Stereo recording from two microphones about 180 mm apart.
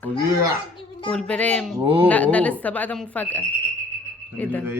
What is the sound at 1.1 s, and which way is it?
Speech, 5° left (ahead or behind).